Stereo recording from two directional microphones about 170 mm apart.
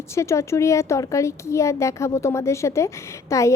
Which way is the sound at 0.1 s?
15° left (ahead or behind).